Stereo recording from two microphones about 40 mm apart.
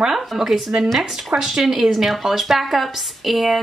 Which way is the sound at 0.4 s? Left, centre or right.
Centre.